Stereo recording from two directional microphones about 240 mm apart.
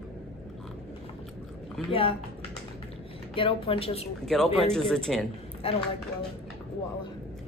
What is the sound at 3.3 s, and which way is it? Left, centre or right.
Speech, left.